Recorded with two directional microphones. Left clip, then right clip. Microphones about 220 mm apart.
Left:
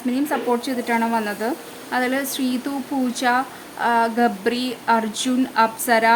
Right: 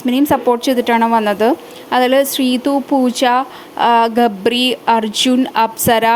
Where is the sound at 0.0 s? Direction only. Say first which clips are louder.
Right 9 dB; 30° right (ahead or behind).